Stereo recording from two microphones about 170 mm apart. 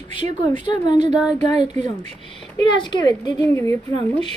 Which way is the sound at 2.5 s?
25° left (ahead or behind).